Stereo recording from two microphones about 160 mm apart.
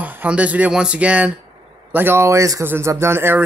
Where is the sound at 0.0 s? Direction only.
10° right (ahead or behind).